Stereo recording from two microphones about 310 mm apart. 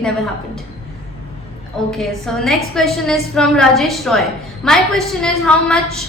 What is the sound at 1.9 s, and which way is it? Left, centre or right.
A woman's voice, centre.